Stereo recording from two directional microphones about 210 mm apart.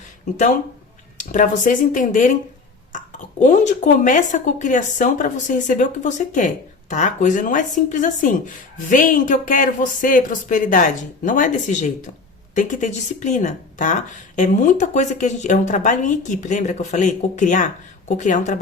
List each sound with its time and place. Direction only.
0.3 s speech: 35° left (ahead or behind)